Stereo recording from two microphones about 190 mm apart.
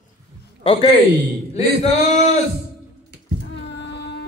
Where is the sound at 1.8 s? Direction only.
35° left (ahead or behind).